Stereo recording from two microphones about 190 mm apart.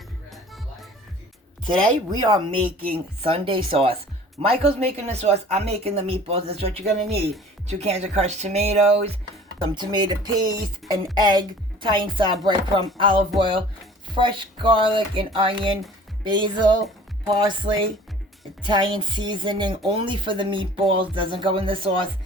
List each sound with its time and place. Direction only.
0.3 s music: centre (ahead or behind)
1.6 s a woman's voice: 25° right (ahead or behind)
9.6 s a woman's voice: 25° right (ahead or behind)